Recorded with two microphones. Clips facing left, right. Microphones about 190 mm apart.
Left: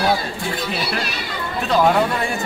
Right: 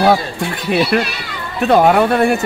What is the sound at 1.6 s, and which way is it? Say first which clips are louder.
Speech: right 6 dB; 60° right (ahead or behind).